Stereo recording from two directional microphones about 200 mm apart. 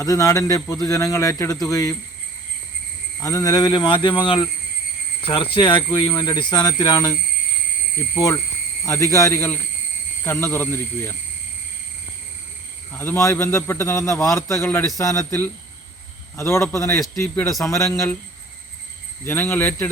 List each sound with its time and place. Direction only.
0.0 s a man's voice: 15° left (ahead or behind)
3.2 s speech: 15° left (ahead or behind)
8.9 s a man's voice: 15° left (ahead or behind)
12.9 s a man's voice: 10° left (ahead or behind)
19.2 s a man's voice: 10° left (ahead or behind)